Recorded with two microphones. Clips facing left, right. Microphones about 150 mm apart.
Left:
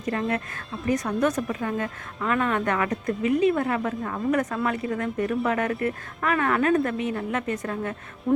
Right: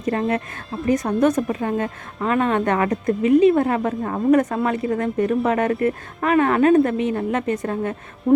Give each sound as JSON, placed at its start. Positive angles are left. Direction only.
{"t": 0.1, "sound": "speech", "side_deg": -30}